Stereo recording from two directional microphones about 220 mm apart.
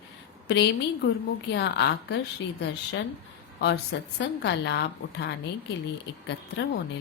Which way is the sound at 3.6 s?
50° left (ahead or behind).